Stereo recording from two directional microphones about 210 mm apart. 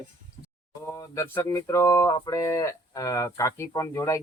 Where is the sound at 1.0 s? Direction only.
10° left (ahead or behind).